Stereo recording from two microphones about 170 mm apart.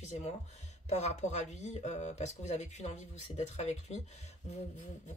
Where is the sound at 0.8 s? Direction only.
40° left (ahead or behind).